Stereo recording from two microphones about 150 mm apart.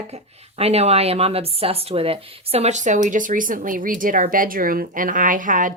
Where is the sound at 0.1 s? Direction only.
45° right (ahead or behind).